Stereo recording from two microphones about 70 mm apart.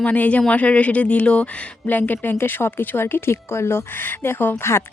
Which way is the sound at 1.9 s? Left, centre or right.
Left.